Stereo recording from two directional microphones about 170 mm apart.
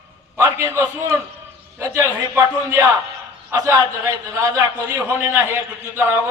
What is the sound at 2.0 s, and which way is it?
A man's voice, 15° right (ahead or behind).